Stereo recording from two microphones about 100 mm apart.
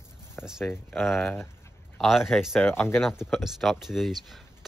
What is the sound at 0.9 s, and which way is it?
Speech, 5° left (ahead or behind).